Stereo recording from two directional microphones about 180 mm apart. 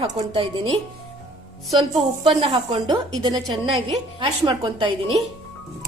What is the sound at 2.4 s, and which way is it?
A woman's voice, 30° right (ahead or behind).